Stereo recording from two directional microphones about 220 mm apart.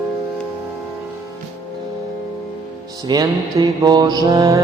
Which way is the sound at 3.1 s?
20° right (ahead or behind).